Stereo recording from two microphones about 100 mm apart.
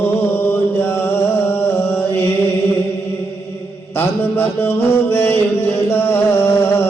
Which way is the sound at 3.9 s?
20° left (ahead or behind).